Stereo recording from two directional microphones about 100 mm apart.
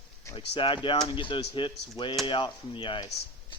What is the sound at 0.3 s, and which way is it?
Speech, 65° left (ahead or behind).